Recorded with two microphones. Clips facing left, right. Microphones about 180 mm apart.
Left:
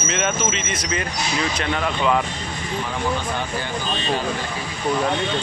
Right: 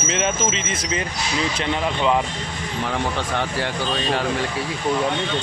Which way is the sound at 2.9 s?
75° right (ahead or behind).